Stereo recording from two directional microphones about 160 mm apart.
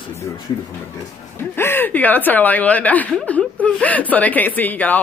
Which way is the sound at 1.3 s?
15° left (ahead or behind).